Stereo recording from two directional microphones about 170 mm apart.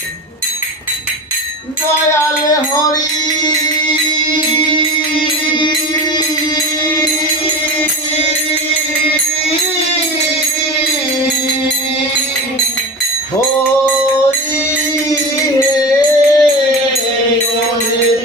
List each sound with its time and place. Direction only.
15.8 s music: 20° left (ahead or behind)